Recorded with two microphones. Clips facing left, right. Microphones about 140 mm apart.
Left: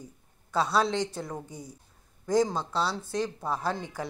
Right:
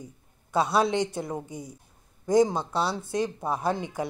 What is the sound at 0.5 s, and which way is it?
A man's voice, 15° right (ahead or behind).